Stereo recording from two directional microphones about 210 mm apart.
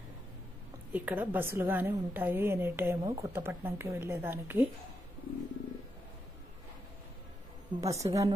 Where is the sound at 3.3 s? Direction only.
10° right (ahead or behind).